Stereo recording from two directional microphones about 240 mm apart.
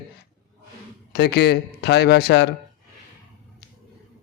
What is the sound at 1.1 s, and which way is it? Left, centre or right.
A man's voice, left.